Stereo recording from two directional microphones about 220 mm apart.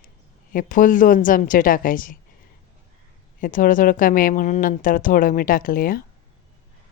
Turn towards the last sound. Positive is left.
turn(degrees=40)  # may be behind; listen again after turning